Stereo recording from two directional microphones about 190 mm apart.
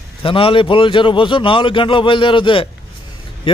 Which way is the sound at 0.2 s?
30° left (ahead or behind).